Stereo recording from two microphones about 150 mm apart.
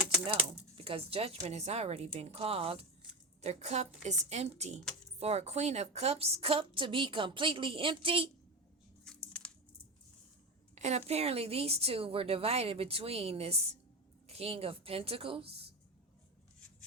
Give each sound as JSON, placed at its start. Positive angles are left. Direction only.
{"t": 0.8, "sound": "a woman's voice", "side_deg": -40}
{"t": 9.0, "sound": "a sound", "side_deg": 5}
{"t": 10.8, "sound": "a woman's voice", "side_deg": -45}